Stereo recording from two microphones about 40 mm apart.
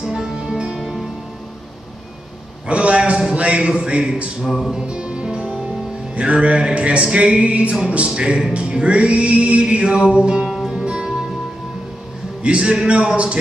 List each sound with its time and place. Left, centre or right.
0.0 s music: centre
2.7 s a sound: right
3.3 s music: right
4.4 s music: centre
4.8 s music: right
12.4 s music: right